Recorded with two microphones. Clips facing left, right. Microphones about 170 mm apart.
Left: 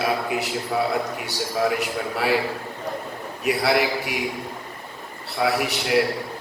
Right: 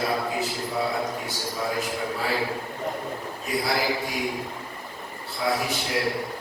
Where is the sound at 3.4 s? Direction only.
70° left (ahead or behind).